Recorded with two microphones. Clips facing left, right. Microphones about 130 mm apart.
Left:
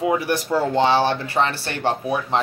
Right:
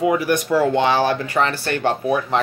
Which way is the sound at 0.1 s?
30° left (ahead or behind).